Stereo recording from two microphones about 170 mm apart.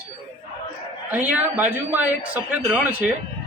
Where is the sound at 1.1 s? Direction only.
10° right (ahead or behind).